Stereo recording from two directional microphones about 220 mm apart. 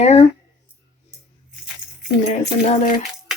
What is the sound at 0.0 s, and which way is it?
Speech, 30° left (ahead or behind).